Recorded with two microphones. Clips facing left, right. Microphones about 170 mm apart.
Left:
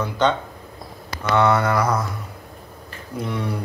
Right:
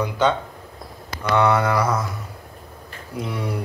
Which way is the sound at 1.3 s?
10° right (ahead or behind).